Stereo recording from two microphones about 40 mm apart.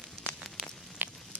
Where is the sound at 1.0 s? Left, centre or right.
Right.